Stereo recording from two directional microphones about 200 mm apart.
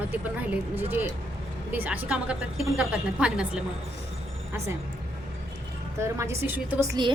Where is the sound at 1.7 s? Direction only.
10° right (ahead or behind).